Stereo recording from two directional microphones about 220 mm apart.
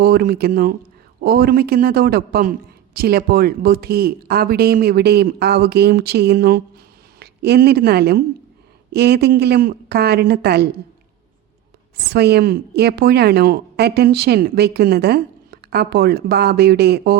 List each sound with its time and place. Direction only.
0.0 s a woman's voice: 45° right (ahead or behind)
12.0 s a woman's voice: 45° right (ahead or behind)